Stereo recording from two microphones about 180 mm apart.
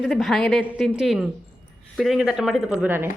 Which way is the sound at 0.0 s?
Centre (ahead or behind).